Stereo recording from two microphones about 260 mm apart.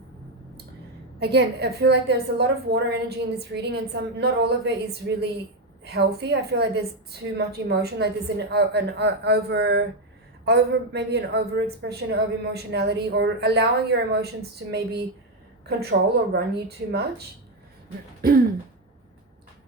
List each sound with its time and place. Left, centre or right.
1.2 s speech: right
18.2 s throat clearing: right